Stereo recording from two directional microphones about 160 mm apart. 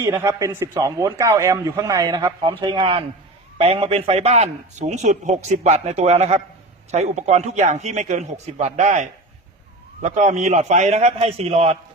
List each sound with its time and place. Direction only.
0.0 s a man's voice: 20° right (ahead or behind); by 11.8 s 40° right (ahead or behind)